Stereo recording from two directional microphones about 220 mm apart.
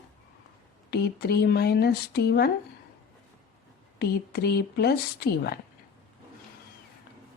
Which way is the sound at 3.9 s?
45° left (ahead or behind).